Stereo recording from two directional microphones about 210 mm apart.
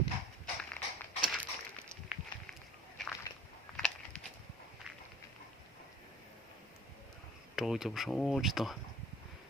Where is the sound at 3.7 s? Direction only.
5° left (ahead or behind).